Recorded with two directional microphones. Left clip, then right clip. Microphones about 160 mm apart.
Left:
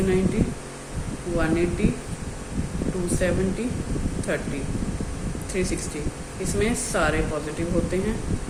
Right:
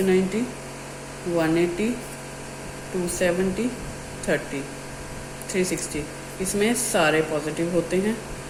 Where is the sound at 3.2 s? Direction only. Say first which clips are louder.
Right 3 dB; 30° right (ahead or behind).